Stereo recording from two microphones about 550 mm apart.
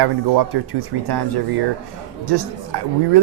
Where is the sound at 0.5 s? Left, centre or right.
Right.